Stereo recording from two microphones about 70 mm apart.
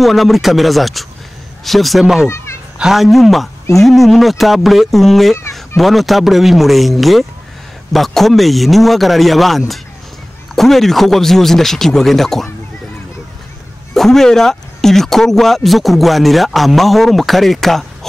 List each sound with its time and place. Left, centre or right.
0.0 s speech: centre
2.2 s a sound: left
2.8 s speech: centre
13.9 s speech: centre